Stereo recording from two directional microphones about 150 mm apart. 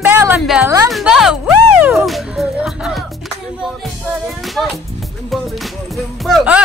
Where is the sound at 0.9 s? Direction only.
5° right (ahead or behind).